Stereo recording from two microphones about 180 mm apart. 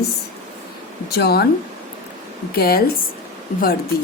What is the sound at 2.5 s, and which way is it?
Speech, 60° left (ahead or behind).